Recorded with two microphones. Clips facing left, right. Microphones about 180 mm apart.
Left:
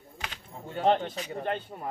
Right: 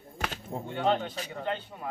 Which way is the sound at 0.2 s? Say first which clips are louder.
Right 8 dB; 45° right (ahead or behind).